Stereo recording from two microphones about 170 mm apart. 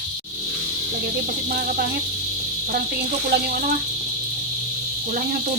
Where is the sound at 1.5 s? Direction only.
60° right (ahead or behind).